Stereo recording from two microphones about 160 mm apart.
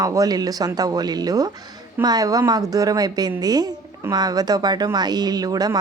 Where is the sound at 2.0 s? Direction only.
25° right (ahead or behind).